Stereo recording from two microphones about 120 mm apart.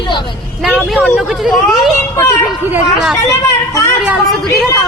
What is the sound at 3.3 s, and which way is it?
Speech, 25° left (ahead or behind).